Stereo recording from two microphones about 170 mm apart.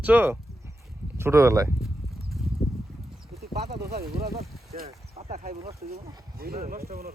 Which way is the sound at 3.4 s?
70° right (ahead or behind).